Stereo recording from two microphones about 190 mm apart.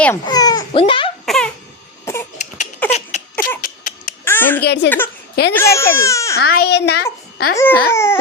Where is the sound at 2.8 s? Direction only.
10° left (ahead or behind).